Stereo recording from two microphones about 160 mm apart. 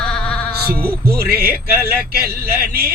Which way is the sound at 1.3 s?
75° right (ahead or behind).